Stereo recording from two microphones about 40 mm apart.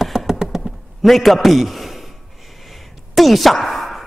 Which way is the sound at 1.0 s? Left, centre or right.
Centre.